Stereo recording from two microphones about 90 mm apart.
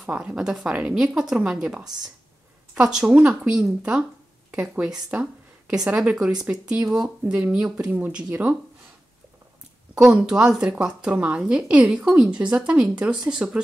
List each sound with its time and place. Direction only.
0.0 s a woman's voice: 10° right (ahead or behind)
5.1 s a sound: 15° right (ahead or behind)
6.2 s a woman's voice: 10° right (ahead or behind)
9.9 s a woman's voice: 10° right (ahead or behind)